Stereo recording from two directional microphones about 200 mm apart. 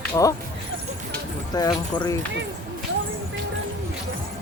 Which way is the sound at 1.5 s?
20° left (ahead or behind).